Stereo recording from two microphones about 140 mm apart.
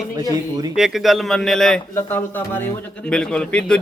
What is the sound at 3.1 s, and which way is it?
Speech, 5° left (ahead or behind).